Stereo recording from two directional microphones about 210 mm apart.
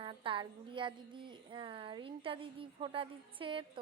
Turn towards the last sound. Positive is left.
turn(degrees=-25)  # may be behind; listen again after turning